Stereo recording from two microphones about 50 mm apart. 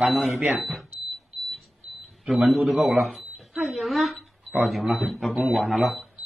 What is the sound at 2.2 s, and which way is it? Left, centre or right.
Speech, centre.